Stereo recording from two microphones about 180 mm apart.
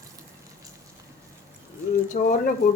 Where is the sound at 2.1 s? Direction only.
50° left (ahead or behind).